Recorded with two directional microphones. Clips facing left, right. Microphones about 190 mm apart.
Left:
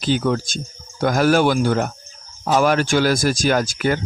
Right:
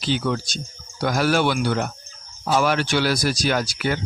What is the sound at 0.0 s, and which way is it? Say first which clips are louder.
A man's voice: left 4 dB; 45° left (ahead or behind).